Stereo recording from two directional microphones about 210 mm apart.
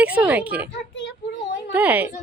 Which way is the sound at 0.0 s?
5° right (ahead or behind).